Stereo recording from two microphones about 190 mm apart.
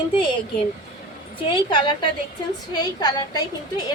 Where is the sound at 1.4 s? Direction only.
25° left (ahead or behind).